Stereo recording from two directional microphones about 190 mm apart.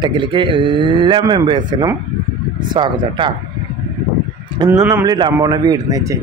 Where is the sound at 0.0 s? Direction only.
25° right (ahead or behind).